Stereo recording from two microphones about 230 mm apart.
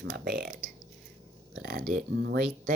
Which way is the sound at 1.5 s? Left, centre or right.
Right.